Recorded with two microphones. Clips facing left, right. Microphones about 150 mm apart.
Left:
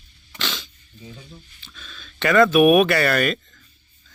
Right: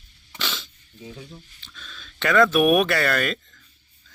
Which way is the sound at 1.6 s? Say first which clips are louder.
Left 1 dB; 5° left (ahead or behind).